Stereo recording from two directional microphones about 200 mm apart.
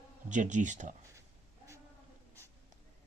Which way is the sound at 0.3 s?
40° right (ahead or behind).